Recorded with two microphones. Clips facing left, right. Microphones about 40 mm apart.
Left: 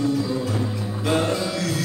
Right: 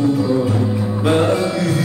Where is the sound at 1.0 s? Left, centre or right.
Right.